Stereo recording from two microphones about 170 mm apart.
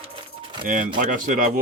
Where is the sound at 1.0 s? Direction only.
50° right (ahead or behind).